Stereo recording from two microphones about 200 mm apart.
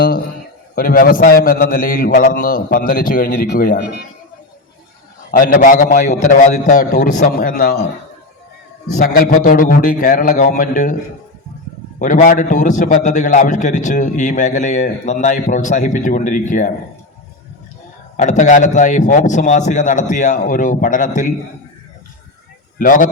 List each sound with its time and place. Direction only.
0.8 s a man's voice: 45° left (ahead or behind)
5.3 s a man's voice: 45° left (ahead or behind)
8.9 s a man's voice: 50° left (ahead or behind)
11.9 s a man's voice: 40° left (ahead or behind)
18.2 s a man's voice: 35° left (ahead or behind)
22.8 s a man's voice: 40° left (ahead or behind)